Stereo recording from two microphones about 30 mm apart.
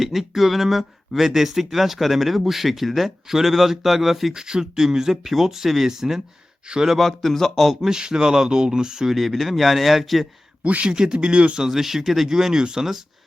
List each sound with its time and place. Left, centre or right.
0.0 s speech: centre
4.4 s speech: right
6.7 s speech: right
7.0 s speech: centre
7.8 s speech: right
9.0 s speech: centre
10.6 s speech: right
11.0 s speech: right
11.7 s speech: centre
12.5 s speech: right